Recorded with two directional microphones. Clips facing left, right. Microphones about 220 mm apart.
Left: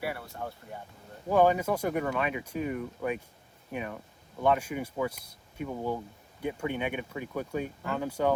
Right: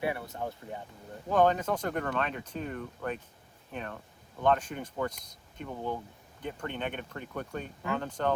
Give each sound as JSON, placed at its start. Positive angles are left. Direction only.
{"t": 0.0, "sound": "speech", "side_deg": -20}
{"t": 1.3, "sound": "speech", "side_deg": 10}